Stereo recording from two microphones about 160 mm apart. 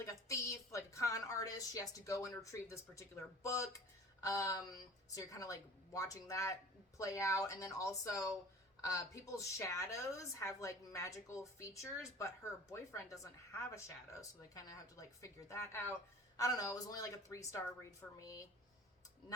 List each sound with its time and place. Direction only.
0.0 s a woman's voice: 20° left (ahead or behind)